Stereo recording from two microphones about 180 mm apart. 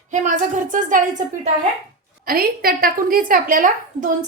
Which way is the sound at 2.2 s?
55° right (ahead or behind).